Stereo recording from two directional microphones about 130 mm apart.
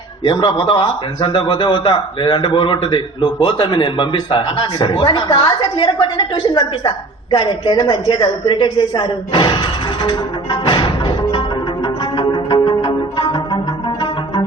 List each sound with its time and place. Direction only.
0.3 s a man's voice: 40° left (ahead or behind)
12.2 s music: 35° left (ahead or behind)